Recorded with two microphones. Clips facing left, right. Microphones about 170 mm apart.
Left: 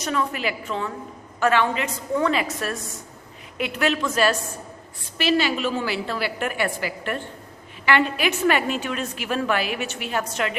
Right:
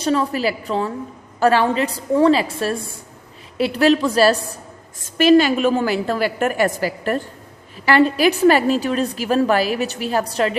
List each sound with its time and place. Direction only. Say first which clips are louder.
0.0 s a woman's voice: right 6 dB; 30° right (ahead or behind)
5.0 s a woman's voice: right 9 dB; 45° right (ahead or behind)